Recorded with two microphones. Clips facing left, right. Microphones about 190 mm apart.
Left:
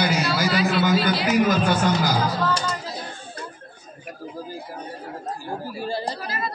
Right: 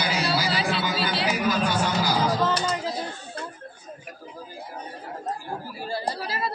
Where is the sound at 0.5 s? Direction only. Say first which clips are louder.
Left 5 dB; 30° right (ahead or behind).